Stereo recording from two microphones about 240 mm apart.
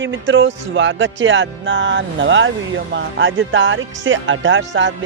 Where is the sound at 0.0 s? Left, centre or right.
Right.